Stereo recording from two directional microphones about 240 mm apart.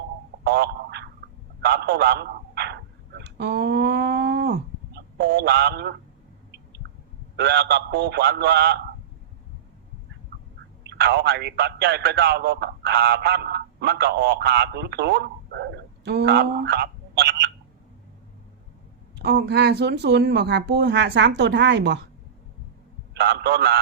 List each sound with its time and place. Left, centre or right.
0.4 s a sound: right
1.6 s a man's voice: right
3.2 s a sound: right
7.3 s speech: right
10.8 s speech: right
19.1 s speech: right
23.1 s speech: right